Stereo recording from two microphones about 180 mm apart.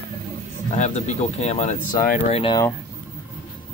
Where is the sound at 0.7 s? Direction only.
40° left (ahead or behind).